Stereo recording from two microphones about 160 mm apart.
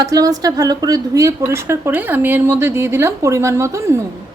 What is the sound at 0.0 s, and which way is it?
A woman's voice, 20° right (ahead or behind).